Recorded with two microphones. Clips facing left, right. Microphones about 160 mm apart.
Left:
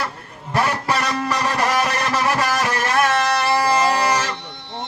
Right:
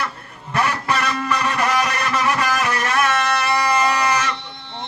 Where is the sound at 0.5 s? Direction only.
30° left (ahead or behind).